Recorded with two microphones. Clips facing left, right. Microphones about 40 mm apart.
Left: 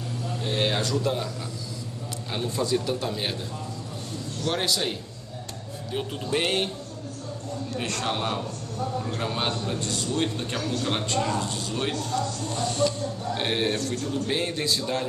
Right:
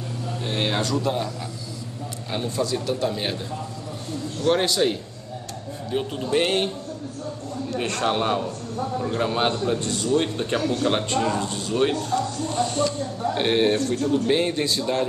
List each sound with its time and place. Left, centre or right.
0.3 s music: centre
2.3 s speech: centre
4.5 s speech: centre
7.7 s a man's voice: centre